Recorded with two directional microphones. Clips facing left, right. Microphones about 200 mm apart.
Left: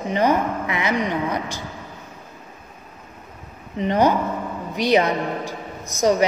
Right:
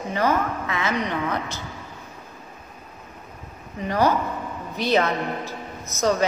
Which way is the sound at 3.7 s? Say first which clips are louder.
Left 3 dB; 20° left (ahead or behind).